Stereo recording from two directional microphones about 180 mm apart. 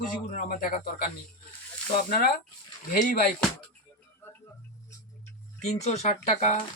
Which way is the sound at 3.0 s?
45° left (ahead or behind).